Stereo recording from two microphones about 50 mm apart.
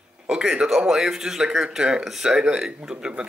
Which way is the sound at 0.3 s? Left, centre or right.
Centre.